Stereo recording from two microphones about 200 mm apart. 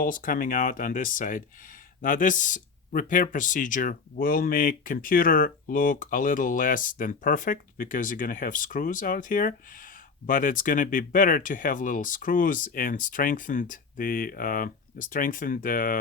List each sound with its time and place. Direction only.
0.0 s speech: 45° left (ahead or behind)